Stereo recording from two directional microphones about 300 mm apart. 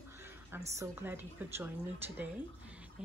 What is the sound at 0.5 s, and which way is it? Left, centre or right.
A woman's voice, centre.